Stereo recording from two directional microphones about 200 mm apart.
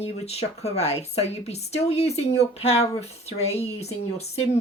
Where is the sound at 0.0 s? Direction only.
30° left (ahead or behind).